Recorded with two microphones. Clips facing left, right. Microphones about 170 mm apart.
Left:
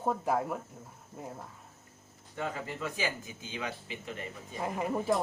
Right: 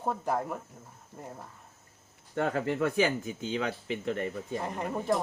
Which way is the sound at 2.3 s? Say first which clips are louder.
Right 8 dB; 65° right (ahead or behind).